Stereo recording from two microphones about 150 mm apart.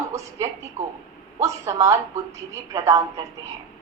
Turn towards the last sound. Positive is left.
turn(degrees=-20)  # may be behind; listen again after turning